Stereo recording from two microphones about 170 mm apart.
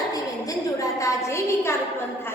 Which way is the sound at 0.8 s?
20° left (ahead or behind).